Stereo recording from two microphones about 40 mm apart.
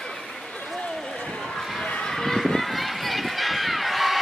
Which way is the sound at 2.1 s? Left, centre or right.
Centre.